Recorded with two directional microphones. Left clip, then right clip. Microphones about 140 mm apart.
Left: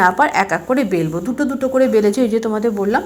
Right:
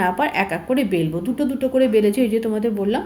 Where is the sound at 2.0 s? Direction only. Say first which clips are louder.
Left 3 dB; 35° right (ahead or behind).